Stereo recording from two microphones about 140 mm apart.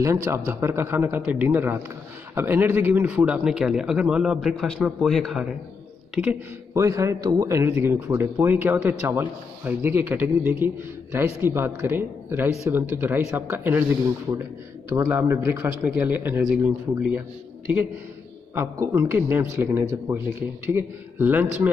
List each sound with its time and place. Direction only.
0.0 s a man's voice: 20° right (ahead or behind); by 5.5 s centre (ahead or behind)
6.7 s a man's voice: 20° right (ahead or behind)
14.9 s a man's voice: 15° right (ahead or behind)
18.5 s a man's voice: 15° right (ahead or behind)